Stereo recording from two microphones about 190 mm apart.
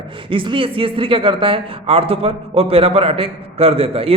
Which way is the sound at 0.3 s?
25° right (ahead or behind).